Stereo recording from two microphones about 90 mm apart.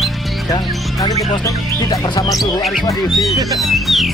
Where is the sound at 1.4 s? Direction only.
40° left (ahead or behind).